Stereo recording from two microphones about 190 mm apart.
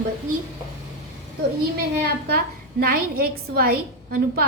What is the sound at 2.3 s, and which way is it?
A woman's voice, 50° right (ahead or behind).